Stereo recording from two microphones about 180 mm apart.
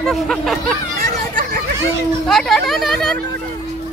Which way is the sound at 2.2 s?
Centre (ahead or behind).